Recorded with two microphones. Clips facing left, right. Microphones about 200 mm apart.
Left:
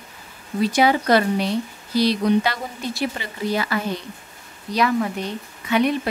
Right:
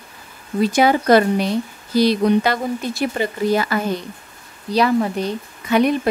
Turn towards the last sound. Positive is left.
turn(degrees=-45)  # may be behind; listen again after turning